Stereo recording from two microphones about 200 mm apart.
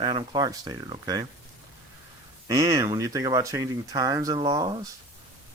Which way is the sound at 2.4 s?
15° right (ahead or behind).